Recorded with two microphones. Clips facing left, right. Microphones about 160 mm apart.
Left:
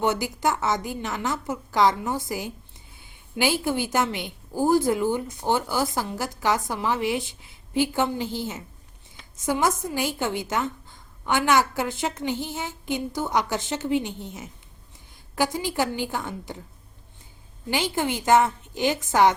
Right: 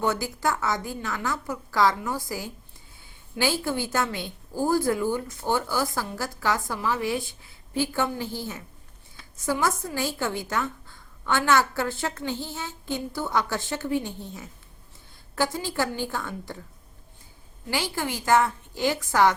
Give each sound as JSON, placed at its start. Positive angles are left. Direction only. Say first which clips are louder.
{"t": 0.0, "sound": "a woman's voice", "louder": "left 2 dB", "side_deg": 20}
{"t": 17.7, "sound": "a woman's voice", "louder": "left 3 dB", "side_deg": 20}